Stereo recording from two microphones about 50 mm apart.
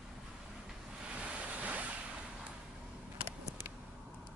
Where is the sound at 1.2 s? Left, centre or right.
Right.